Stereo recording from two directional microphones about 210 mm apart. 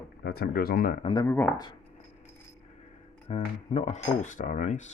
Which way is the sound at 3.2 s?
30° left (ahead or behind).